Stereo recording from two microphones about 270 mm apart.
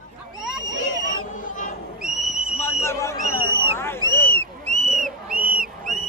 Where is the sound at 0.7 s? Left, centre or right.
Left.